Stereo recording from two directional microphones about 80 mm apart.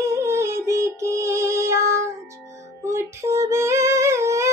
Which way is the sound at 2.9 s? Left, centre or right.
Right.